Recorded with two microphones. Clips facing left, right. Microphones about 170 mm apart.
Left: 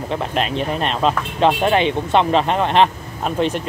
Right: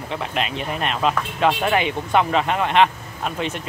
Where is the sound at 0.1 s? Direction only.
40° left (ahead or behind).